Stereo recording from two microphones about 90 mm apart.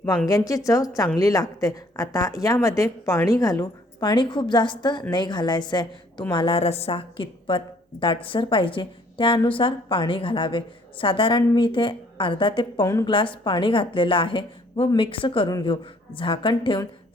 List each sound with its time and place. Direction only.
0.3 s a woman's voice: 40° left (ahead or behind)
4.1 s a woman's voice: 55° left (ahead or behind)
6.3 s a woman's voice: 85° left
12.8 s a woman's voice: 35° left (ahead or behind)
13.1 s a woman's voice: 70° left (ahead or behind)